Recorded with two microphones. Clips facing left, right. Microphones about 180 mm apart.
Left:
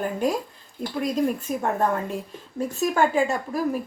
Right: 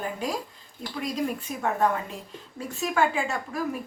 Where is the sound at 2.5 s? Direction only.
45° left (ahead or behind).